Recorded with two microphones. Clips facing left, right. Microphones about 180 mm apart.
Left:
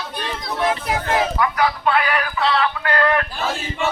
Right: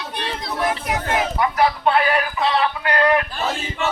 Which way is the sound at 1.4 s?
25° right (ahead or behind).